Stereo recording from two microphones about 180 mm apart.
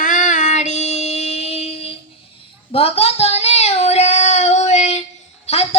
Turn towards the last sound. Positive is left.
turn(degrees=35)  # may be behind; listen again after turning